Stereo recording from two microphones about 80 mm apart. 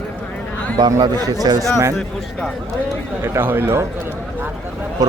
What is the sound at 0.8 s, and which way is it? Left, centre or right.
Speech, right.